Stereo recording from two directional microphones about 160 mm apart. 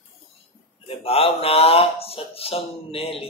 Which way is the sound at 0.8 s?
35° left (ahead or behind).